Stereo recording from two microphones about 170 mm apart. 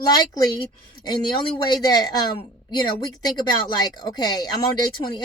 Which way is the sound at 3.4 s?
25° left (ahead or behind).